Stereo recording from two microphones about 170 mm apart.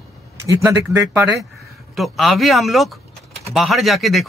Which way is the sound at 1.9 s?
Centre (ahead or behind).